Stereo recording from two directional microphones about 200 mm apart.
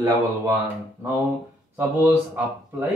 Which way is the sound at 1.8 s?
10° right (ahead or behind).